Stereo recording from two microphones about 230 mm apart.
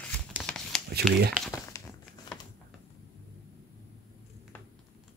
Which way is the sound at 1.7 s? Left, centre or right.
Centre.